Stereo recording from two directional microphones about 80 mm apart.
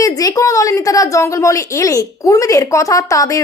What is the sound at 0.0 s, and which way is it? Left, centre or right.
A woman's voice, left.